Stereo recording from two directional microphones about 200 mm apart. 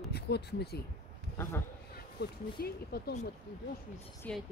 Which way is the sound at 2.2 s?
55° left (ahead or behind).